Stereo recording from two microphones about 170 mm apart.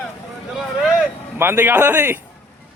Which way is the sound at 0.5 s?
5° right (ahead or behind).